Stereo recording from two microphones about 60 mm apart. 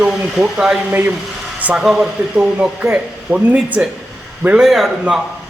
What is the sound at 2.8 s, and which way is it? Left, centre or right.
A man's voice, right.